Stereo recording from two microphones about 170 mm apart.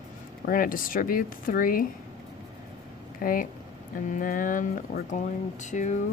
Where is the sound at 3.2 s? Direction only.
55° left (ahead or behind).